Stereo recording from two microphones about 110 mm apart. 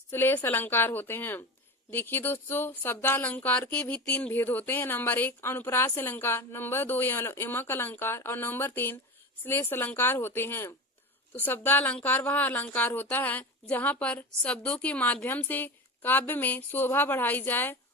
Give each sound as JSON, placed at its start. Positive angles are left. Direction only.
{"t": 0.1, "sound": "a woman's voice", "side_deg": 20}